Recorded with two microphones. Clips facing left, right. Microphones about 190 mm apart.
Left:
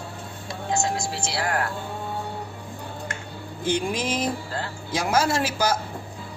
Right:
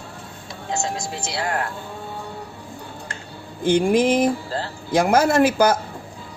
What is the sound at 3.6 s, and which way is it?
A man's voice, 55° right (ahead or behind).